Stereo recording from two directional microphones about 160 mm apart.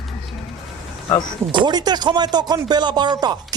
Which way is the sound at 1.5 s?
25° right (ahead or behind).